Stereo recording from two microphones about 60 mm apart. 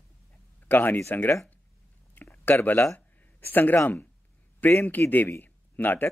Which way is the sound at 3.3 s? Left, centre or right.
Left.